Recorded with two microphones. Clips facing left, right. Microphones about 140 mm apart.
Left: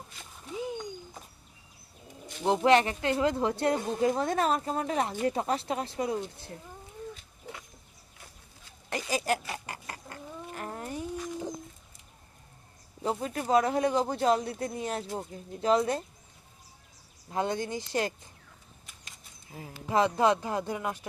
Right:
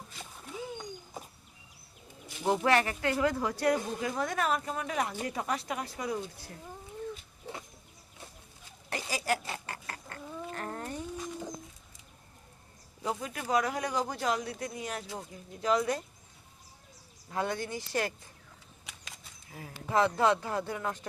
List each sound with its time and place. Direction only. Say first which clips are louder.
2.4 s speech: left 4 dB; 20° left (ahead or behind)
8.9 s a sound: left 3 dB; 20° left (ahead or behind)
13.0 s speech: left 4 dB; 30° left (ahead or behind)
17.2 s speech: left 3 dB; 20° left (ahead or behind)
18.9 s a sound: right 7 dB; 80° right
19.5 s speech: left 2 dB; 20° left (ahead or behind)